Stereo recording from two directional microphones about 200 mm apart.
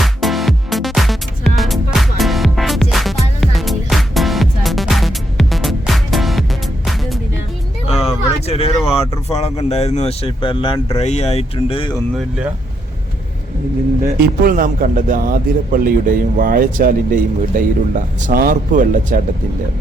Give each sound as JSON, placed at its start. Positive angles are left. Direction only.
{"t": 0.0, "sound": "music", "side_deg": 0}
{"t": 8.4, "sound": "a sound", "side_deg": 30}
{"t": 9.0, "sound": "speech", "side_deg": 30}
{"t": 14.0, "sound": "a man's voice", "side_deg": -45}